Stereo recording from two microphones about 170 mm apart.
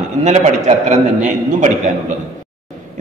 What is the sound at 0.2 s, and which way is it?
A man's voice, 40° right (ahead or behind).